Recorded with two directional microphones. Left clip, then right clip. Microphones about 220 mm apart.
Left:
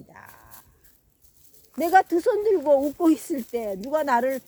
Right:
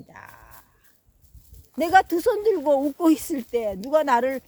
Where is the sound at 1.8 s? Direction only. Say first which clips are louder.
Right 1 dB; 40° right (ahead or behind).